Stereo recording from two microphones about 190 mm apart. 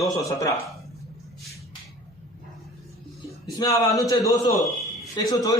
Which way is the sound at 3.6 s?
20° left (ahead or behind).